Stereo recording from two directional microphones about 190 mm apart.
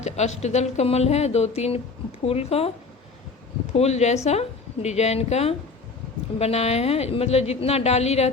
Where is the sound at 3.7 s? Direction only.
35° left (ahead or behind).